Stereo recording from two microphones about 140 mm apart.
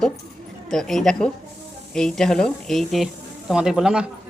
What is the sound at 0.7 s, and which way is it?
A woman's voice, 5° left (ahead or behind).